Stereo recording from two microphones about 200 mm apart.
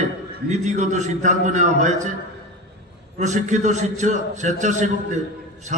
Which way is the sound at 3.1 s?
40° right (ahead or behind).